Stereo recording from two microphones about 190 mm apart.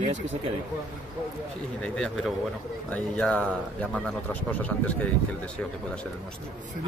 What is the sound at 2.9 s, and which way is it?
Speech, 5° left (ahead or behind).